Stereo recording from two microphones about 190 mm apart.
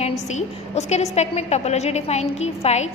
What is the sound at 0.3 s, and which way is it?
A woman's voice, 35° left (ahead or behind).